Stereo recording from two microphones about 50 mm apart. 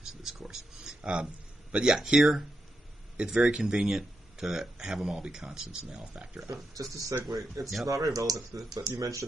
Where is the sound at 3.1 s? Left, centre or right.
Right.